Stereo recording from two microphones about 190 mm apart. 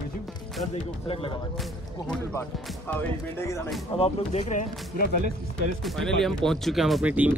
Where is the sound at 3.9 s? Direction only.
35° left (ahead or behind).